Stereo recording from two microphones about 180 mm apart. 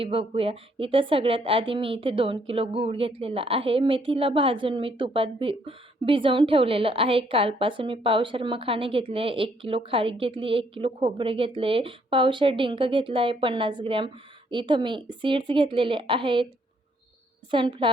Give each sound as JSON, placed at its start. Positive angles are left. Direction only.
{"t": 0.0, "sound": "a woman's voice", "side_deg": -30}
{"t": 17.5, "sound": "a woman's voice", "side_deg": -25}